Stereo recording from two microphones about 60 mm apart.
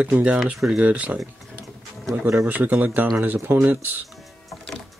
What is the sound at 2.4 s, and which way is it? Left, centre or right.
Speech, right.